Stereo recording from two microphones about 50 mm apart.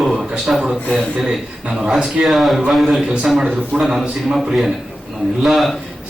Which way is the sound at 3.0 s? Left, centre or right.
Right.